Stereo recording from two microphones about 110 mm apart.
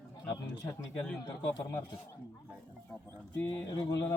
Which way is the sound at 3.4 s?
35° left (ahead or behind).